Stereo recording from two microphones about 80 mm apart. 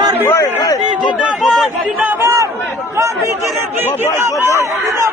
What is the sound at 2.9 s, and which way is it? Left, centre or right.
Chatter, right.